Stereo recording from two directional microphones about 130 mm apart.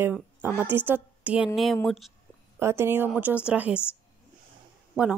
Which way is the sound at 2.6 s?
20° right (ahead or behind).